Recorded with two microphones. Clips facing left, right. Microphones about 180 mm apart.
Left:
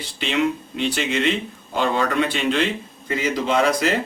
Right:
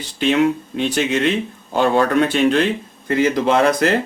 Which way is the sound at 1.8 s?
55° right (ahead or behind).